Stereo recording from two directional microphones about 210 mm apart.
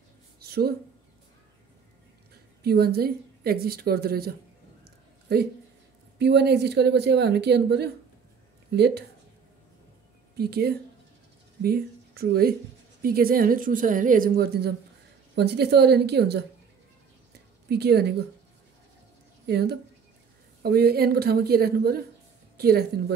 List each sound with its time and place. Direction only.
0.4 s a sound: 50° right (ahead or behind)
2.6 s a woman's voice: 50° right (ahead or behind)
10.3 s a woman's voice: 50° right (ahead or behind)
17.6 s speech: 50° right (ahead or behind)
19.5 s a woman's voice: 50° right (ahead or behind)